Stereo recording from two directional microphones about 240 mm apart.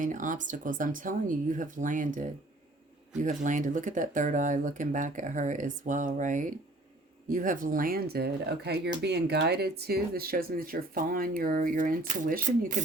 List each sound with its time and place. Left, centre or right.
0.0 s speech: right
3.2 s speech: right